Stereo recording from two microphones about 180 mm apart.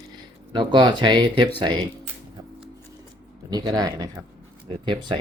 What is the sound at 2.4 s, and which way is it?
Scissors, 20° right (ahead or behind).